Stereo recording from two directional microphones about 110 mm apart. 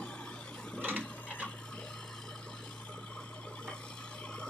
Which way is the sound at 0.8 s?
15° right (ahead or behind).